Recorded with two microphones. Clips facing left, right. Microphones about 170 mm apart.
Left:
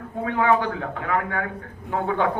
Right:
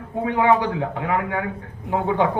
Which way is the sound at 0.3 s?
20° right (ahead or behind).